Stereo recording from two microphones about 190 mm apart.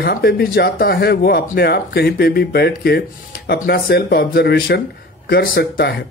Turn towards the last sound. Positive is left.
turn(degrees=55)  # may be behind; listen again after turning